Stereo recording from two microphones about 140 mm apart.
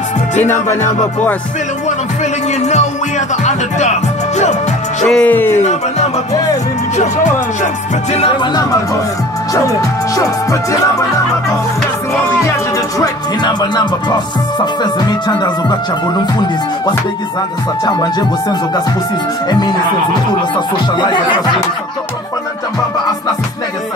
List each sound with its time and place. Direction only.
2.6 s music: 55° left (ahead or behind)
5.0 s music: 10° left (ahead or behind)
5.6 s music: 55° left (ahead or behind)
9.5 s music: 25° left (ahead or behind)
13.0 s music: 30° left (ahead or behind)
17.8 s music: 30° left (ahead or behind)
19.5 s speech: 30° left (ahead or behind)